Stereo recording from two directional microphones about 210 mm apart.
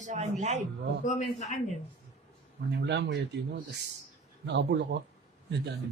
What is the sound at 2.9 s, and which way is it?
Speech, 55° right (ahead or behind).